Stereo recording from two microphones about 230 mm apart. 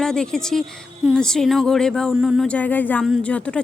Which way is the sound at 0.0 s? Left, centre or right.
Centre.